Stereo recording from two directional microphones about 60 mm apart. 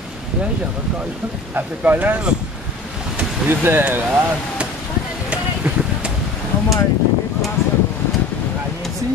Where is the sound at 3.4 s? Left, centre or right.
Right.